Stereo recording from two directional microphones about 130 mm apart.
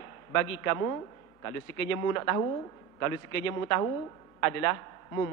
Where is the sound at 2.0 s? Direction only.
25° left (ahead or behind).